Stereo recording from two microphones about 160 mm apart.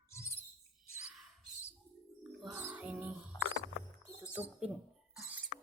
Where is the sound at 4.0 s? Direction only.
10° right (ahead or behind).